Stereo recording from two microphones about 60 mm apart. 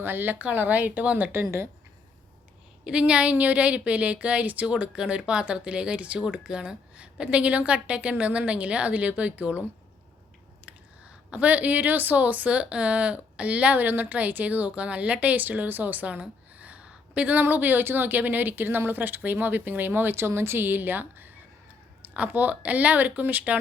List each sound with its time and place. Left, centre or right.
0.0 s a woman's voice: right
1.3 s speech: right
2.8 s a woman's voice: centre
11.3 s a woman's voice: right
16.2 s a sound: right
17.4 s a woman's voice: right